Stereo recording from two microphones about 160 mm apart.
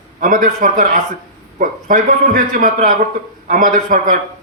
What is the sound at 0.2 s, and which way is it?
A man's voice, 60° right (ahead or behind).